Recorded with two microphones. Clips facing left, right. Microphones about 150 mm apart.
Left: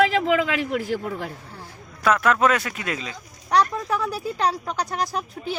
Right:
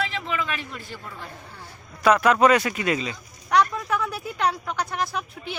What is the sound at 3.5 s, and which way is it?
Speech, 35° left (ahead or behind).